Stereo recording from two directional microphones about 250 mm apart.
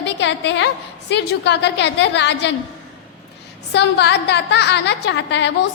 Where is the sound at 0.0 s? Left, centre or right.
Left.